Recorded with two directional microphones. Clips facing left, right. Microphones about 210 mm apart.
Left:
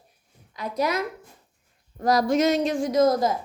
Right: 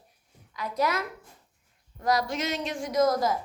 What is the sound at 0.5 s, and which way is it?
Speech, 20° left (ahead or behind).